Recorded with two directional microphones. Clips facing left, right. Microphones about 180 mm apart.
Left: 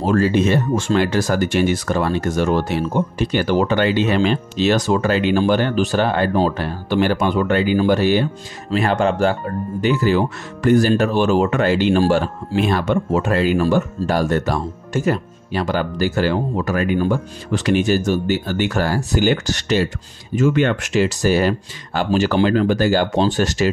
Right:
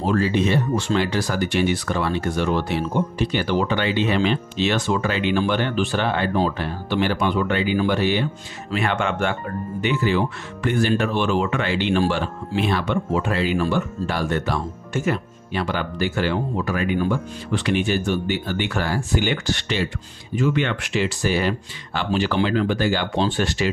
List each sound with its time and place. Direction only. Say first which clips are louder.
0.0 s speech: left 4 dB; 45° left (ahead or behind)